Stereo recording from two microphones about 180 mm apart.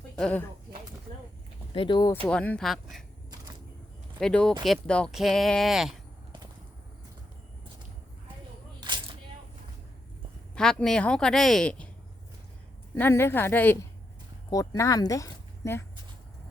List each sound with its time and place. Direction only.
0.2 s speech: 10° left (ahead or behind)
1.7 s speech: 30° left (ahead or behind)
2.2 s speech: 5° left (ahead or behind)
4.2 s speech: 5° left (ahead or behind)
8.8 s a sound: 25° right (ahead or behind)
10.5 s speech: 5° left (ahead or behind)
12.9 s speech: 10° left (ahead or behind)